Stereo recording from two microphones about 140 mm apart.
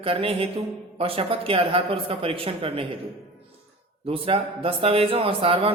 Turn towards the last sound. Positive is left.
turn(degrees=-40)  # may be behind; listen again after turning